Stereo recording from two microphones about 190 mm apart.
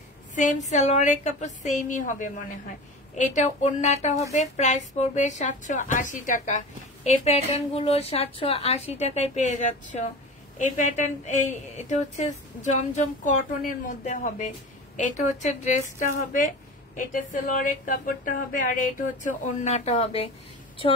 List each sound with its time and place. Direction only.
0.4 s a woman's voice: 40° left (ahead or behind)